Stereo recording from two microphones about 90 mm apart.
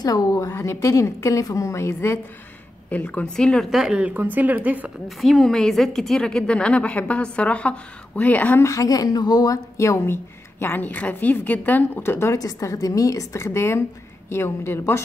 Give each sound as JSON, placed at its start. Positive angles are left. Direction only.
{"t": 0.0, "sound": "a woman's voice", "side_deg": 45}
{"t": 2.9, "sound": "a woman's voice", "side_deg": 15}
{"t": 3.7, "sound": "speech", "side_deg": -5}
{"t": 4.0, "sound": "speech", "side_deg": -20}
{"t": 5.0, "sound": "a woman's voice", "side_deg": 0}
{"t": 8.6, "sound": "a woman's voice", "side_deg": 40}
{"t": 9.8, "sound": "a woman's voice", "side_deg": 30}
{"t": 10.6, "sound": "a woman's voice", "side_deg": 20}
{"t": 12.4, "sound": "a woman's voice", "side_deg": 40}